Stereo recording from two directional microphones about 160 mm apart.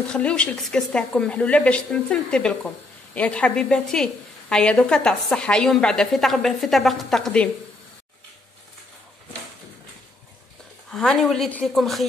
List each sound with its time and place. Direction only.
0.1 s a woman's voice: 5° left (ahead or behind)
10.9 s a woman's voice: 5° left (ahead or behind)